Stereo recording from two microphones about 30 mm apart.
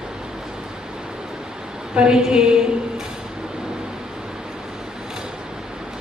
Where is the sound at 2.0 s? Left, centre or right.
Right.